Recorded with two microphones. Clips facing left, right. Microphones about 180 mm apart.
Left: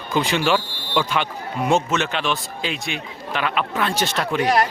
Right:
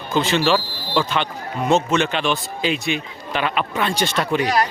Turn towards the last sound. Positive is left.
turn(degrees=0)  # may be behind; listen again after turning